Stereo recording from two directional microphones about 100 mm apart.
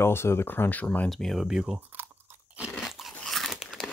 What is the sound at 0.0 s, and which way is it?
Speech, 25° left (ahead or behind).